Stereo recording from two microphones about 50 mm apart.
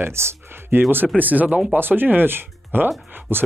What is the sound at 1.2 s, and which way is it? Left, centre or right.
Speech, right.